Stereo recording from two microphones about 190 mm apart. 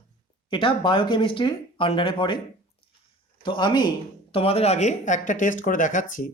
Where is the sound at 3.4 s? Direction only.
25° left (ahead or behind).